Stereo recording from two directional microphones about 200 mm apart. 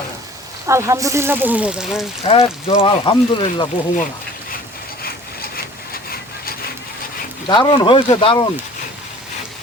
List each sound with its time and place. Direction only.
0.7 s speech: 15° right (ahead or behind)
2.2 s speech: 30° left (ahead or behind)
5.0 s wood: 50° left (ahead or behind)
7.4 s speech: 20° left (ahead or behind)